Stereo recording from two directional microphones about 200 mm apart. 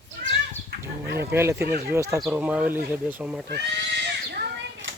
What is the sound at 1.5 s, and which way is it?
Speech, 50° right (ahead or behind).